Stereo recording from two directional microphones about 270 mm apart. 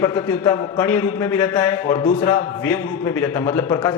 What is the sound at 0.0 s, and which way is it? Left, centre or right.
A man's voice, centre.